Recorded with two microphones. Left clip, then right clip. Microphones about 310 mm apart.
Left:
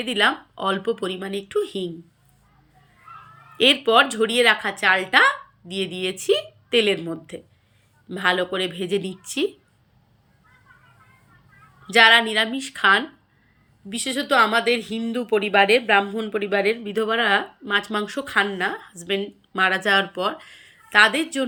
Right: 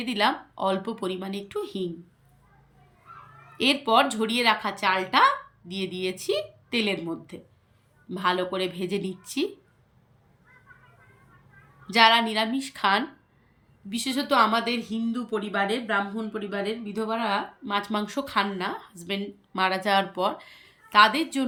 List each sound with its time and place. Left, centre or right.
0.1 s a woman's voice: centre
3.6 s a woman's voice: centre
11.9 s a woman's voice: centre
14.9 s speech: left
16.8 s a woman's voice: centre